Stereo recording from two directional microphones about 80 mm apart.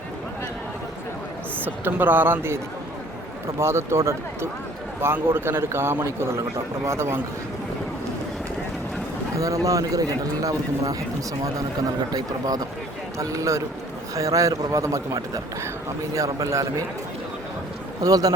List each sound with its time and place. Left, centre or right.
1.6 s speech: right
3.6 s a man's voice: right
9.3 s speech: right
12.1 s speech: right
13.1 s a man's voice: right
18.0 s speech: right